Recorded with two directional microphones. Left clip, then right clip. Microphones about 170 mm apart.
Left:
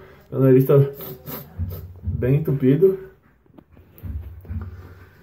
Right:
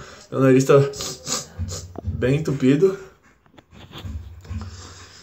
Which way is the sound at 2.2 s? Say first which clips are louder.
Right 1 dB; 15° right (ahead or behind).